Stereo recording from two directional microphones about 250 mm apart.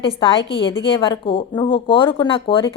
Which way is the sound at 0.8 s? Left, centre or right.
Left.